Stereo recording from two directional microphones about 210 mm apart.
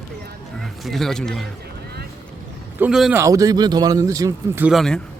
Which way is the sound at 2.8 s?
5° right (ahead or behind).